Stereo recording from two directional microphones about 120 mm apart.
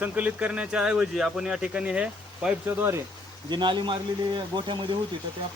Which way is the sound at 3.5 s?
40° right (ahead or behind).